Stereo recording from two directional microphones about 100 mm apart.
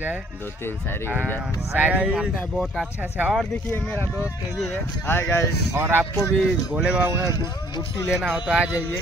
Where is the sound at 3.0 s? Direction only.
15° right (ahead or behind).